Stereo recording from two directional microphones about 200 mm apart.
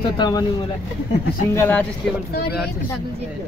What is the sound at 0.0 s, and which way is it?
Speech, 20° left (ahead or behind).